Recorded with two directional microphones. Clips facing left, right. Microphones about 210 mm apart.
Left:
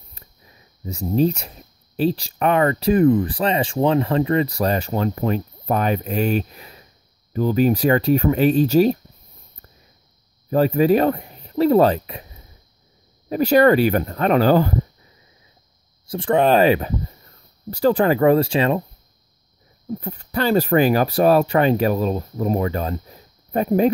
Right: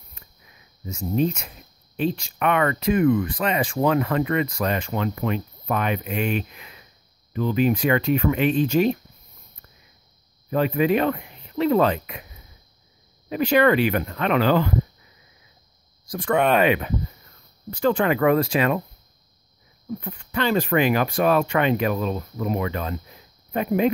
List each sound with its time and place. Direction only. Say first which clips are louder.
0.1 s a sound: left 3 dB; 35° left (ahead or behind)
2.0 s speech: left 4 dB; 35° left (ahead or behind)
10.5 s speech: left 4 dB; 35° left (ahead or behind)
13.3 s speech: left 4 dB; 40° left (ahead or behind)
16.1 s speech: left 4 dB; 30° left (ahead or behind)
20.0 s speech: left 3 dB; 40° left (ahead or behind)